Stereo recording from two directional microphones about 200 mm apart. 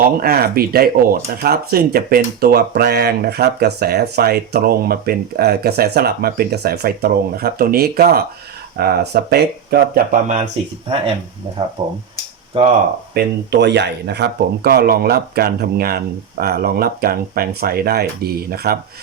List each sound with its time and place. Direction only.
0.0 s speech: 45° right (ahead or behind)
11.8 s speech: 20° right (ahead or behind)
13.1 s speech: 55° right (ahead or behind)